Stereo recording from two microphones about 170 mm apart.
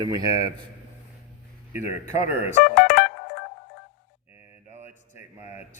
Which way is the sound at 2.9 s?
60° left (ahead or behind).